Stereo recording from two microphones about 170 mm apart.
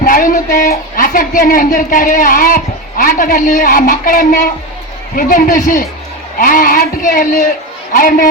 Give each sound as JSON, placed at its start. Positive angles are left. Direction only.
{"t": 0.0, "sound": "a man's voice", "side_deg": 55}